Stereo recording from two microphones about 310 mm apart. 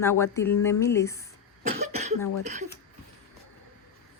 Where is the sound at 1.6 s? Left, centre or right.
Right.